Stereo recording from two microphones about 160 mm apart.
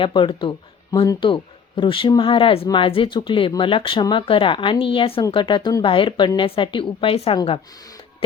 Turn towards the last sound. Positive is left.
turn(degrees=35)  # may be behind; listen again after turning